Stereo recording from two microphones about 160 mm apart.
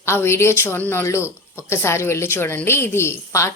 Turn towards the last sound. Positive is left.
turn(degrees=20)  # may be behind; listen again after turning